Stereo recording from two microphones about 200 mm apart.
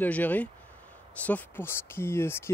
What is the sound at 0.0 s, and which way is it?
Speech, 10° left (ahead or behind).